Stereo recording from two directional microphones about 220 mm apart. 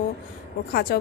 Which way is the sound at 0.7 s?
45° left (ahead or behind).